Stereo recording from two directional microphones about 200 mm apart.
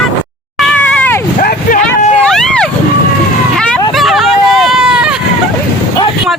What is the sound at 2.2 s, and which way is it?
Vehicle, 5° left (ahead or behind).